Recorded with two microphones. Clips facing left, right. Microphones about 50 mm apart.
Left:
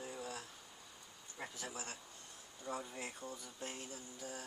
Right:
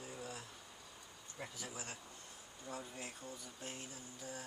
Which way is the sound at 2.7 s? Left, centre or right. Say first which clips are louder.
Left 3 dB; left.